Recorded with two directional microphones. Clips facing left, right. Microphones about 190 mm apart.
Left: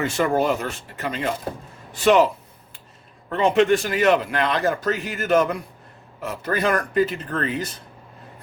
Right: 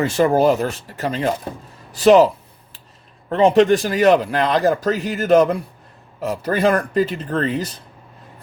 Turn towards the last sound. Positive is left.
turn(degrees=-35)  # may be behind; listen again after turning